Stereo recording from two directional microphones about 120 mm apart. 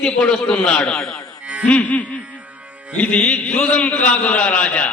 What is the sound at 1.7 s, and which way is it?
A man's voice, 10° left (ahead or behind).